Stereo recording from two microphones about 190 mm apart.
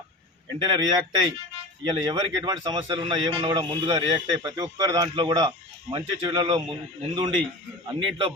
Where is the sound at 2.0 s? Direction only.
25° right (ahead or behind).